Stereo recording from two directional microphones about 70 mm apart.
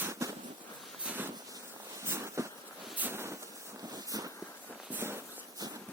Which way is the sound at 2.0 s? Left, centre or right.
Right.